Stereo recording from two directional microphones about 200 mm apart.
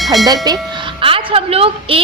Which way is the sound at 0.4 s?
20° right (ahead or behind).